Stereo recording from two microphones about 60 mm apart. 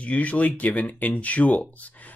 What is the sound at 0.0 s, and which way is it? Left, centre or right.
Speech, left.